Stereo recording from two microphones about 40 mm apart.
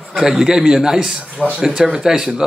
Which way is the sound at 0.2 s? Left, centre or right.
Centre.